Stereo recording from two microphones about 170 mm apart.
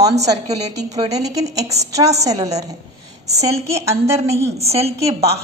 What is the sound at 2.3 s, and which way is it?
A woman's voice, 40° right (ahead or behind).